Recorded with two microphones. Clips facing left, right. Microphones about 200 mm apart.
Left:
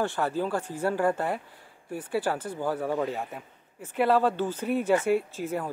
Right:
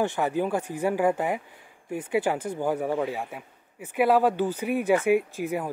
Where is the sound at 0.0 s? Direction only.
15° right (ahead or behind).